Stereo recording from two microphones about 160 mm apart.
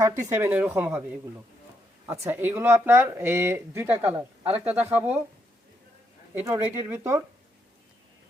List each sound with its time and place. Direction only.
0.2 s speech: 15° right (ahead or behind)
2.0 s speech: 15° right (ahead or behind)
6.3 s speech: 15° right (ahead or behind)